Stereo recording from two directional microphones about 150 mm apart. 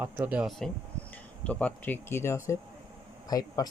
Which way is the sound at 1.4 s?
10° left (ahead or behind).